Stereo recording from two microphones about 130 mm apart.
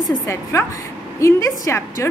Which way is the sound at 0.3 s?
20° left (ahead or behind).